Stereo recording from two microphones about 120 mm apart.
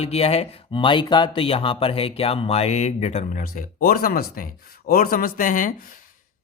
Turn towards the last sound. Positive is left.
turn(degrees=90)